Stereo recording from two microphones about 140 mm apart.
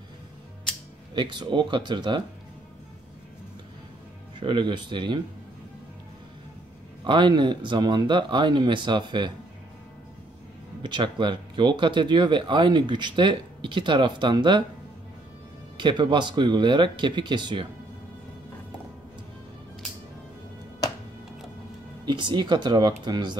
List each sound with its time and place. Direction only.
1.1 s speech: 35° right (ahead or behind)
4.4 s speech: 35° right (ahead or behind)
7.1 s speech: 35° right (ahead or behind)
10.8 s speech: 35° right (ahead or behind)
15.8 s speech: 35° right (ahead or behind)
22.0 s speech: 35° right (ahead or behind)